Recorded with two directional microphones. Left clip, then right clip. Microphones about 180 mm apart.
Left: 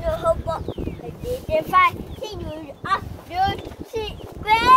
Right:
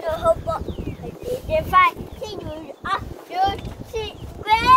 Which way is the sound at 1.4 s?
15° left (ahead or behind).